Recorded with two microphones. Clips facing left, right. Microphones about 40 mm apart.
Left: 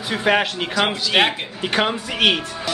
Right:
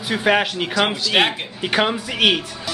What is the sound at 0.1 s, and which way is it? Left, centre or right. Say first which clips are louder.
A child's voice: right 1 dB; centre.